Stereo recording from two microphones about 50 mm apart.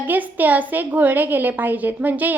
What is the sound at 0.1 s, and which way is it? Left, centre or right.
A woman's voice, right.